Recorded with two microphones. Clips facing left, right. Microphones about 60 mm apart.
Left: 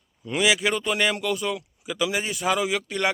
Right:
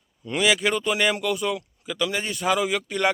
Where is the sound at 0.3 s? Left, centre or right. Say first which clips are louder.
Even; centre.